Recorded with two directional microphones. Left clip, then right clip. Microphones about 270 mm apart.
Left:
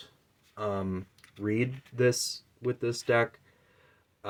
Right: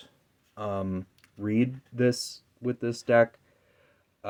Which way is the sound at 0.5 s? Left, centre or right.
Right.